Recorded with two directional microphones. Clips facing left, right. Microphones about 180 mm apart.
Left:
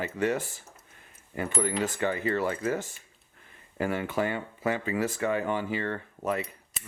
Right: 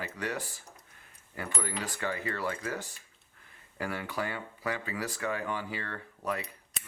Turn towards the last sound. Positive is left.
turn(degrees=0)  # may be behind; listen again after turning